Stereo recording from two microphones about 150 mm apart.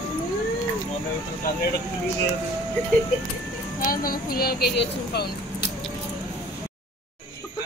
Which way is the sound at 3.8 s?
75° left (ahead or behind).